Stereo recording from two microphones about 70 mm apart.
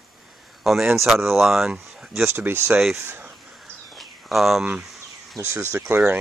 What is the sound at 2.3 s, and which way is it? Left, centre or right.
Speech, right.